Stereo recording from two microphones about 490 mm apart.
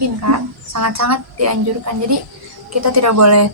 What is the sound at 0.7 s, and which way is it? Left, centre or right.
Speech, right.